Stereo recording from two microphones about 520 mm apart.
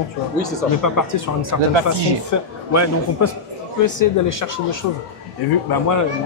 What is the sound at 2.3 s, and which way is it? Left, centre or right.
Speech, left.